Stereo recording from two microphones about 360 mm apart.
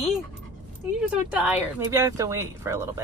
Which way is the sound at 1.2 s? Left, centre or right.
Centre.